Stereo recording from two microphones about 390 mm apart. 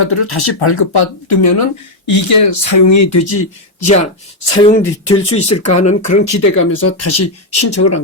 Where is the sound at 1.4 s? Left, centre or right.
Left.